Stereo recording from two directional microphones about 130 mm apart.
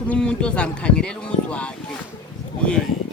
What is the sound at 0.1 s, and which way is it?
Speech, 10° left (ahead or behind).